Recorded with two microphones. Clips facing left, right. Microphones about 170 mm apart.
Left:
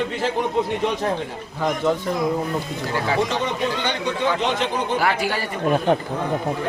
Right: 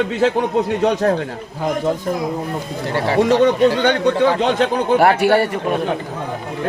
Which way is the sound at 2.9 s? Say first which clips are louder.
Right 7 dB; 35° right (ahead or behind).